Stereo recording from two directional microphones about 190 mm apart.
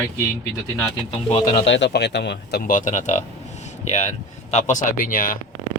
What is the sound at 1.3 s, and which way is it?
Speech, 30° left (ahead or behind).